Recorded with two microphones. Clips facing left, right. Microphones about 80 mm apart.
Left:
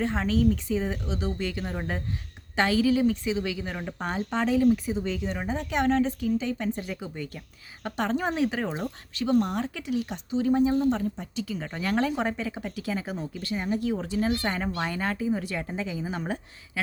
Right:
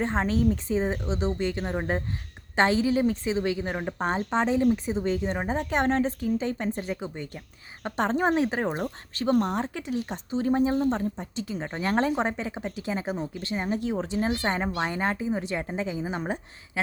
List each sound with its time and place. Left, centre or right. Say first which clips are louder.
0.0 s a woman's voice: even; right